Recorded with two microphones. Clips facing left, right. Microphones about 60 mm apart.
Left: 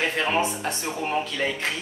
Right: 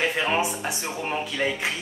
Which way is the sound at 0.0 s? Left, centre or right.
Centre.